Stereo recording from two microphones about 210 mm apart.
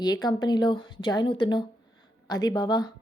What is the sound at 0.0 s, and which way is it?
A woman's voice, 20° left (ahead or behind).